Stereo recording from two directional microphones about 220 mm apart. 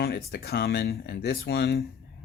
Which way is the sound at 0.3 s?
45° left (ahead or behind).